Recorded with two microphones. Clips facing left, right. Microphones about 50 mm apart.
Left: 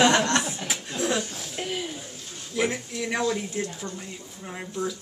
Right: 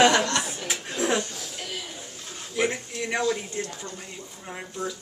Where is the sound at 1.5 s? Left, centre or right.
Left.